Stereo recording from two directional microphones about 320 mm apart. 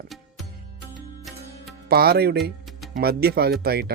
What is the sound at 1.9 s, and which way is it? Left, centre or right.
Speech, right.